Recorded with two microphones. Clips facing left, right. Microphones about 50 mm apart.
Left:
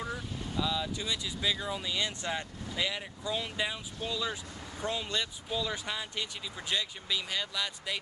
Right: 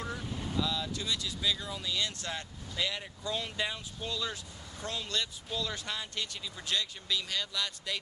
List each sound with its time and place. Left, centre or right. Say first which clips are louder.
0.0 s vehicle: left 1 dB; centre
0.6 s speech: left 2 dB; centre